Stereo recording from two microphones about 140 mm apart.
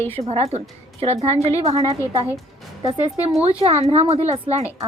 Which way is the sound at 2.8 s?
35° right (ahead or behind).